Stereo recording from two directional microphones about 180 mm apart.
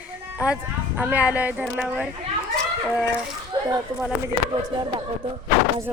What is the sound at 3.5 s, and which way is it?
Speech, 20° right (ahead or behind).